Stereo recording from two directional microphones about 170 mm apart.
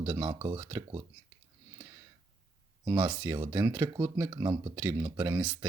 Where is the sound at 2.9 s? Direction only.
20° right (ahead or behind).